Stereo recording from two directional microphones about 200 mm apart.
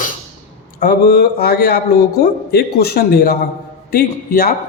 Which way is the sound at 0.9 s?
50° left (ahead or behind).